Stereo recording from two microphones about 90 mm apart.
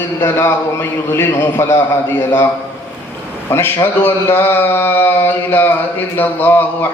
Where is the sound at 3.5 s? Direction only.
25° left (ahead or behind).